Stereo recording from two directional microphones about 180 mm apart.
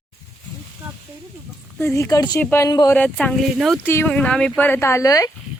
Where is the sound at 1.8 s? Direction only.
15° left (ahead or behind).